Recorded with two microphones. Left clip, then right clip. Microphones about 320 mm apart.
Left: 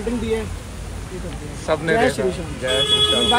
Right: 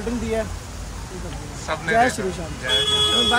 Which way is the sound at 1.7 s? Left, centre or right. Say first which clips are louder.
Left 1 dB; centre.